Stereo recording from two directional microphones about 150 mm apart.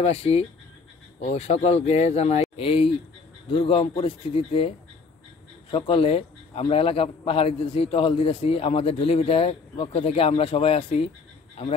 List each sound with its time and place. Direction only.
0.0 s a man's voice: 40° left (ahead or behind)